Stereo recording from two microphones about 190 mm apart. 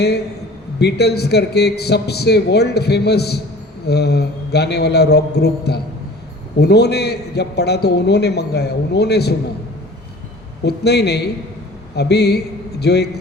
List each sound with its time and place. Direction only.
0.8 s a man's voice: 60° left (ahead or behind)
10.6 s a man's voice: 60° left (ahead or behind)